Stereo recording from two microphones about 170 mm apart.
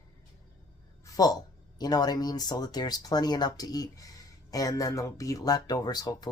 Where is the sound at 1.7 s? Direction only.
25° left (ahead or behind).